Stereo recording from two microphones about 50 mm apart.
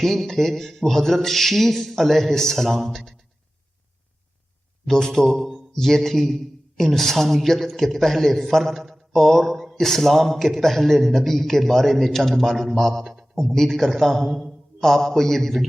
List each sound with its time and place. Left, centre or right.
0.0 s a man's voice: centre
4.9 s a man's voice: centre